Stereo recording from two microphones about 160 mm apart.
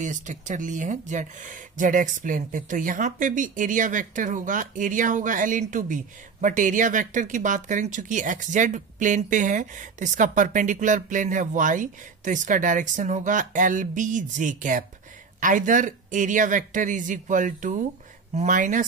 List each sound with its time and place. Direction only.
0.0 s speech: 50° right (ahead or behind)